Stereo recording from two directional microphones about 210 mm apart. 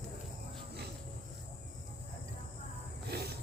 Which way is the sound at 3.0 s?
50° right (ahead or behind).